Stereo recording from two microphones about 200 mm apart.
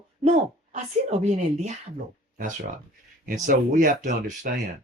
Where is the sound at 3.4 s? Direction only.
40° right (ahead or behind).